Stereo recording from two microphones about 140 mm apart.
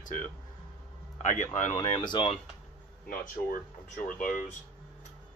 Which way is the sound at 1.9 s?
35° left (ahead or behind).